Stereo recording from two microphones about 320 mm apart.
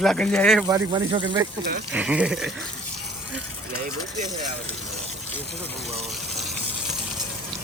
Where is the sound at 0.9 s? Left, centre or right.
Centre.